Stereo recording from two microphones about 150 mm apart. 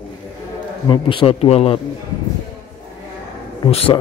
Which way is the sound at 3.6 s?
40° left (ahead or behind).